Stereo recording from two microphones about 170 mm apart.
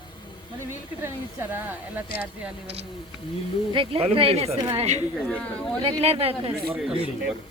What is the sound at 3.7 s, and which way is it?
Speech, 30° right (ahead or behind).